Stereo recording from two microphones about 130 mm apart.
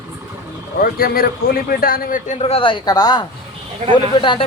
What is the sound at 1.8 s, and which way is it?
Speech, 90° left.